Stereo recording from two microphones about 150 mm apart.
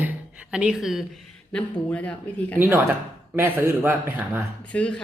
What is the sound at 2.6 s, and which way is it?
Speech, 15° right (ahead or behind).